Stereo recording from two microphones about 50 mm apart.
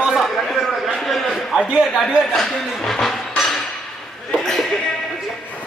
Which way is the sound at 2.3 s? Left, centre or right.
Centre.